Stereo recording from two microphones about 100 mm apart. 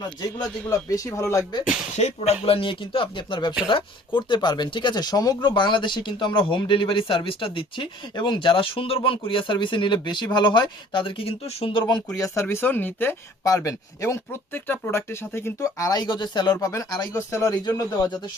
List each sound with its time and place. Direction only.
0.7 s speech: 35° left (ahead or behind)
2.0 s speech: 90° left; by 5.5 s 40° left (ahead or behind)
5.5 s speech: 50° left (ahead or behind); by 11.8 s 70° left (ahead or behind)
12.1 s speech: 30° left (ahead or behind)
13.4 s speech: 35° left (ahead or behind)
15.9 s speech: 45° left (ahead or behind)